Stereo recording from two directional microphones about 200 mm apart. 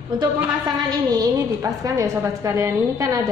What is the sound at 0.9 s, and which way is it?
A woman's voice, 20° right (ahead or behind).